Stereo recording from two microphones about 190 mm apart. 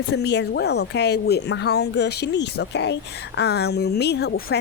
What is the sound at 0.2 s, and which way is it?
Speech, 65° left (ahead or behind).